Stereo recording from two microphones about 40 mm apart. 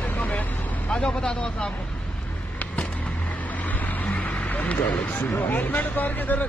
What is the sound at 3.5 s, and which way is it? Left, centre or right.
Vehicle, left.